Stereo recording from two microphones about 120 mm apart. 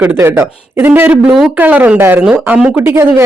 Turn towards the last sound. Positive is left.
turn(degrees=-15)  # may be behind; listen again after turning